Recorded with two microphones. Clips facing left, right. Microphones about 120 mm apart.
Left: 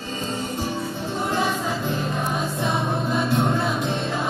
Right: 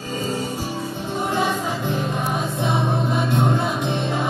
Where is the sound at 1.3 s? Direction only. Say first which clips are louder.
Right 1 dB; 15° right (ahead or behind).